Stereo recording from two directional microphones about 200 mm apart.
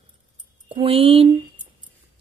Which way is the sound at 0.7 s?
25° right (ahead or behind).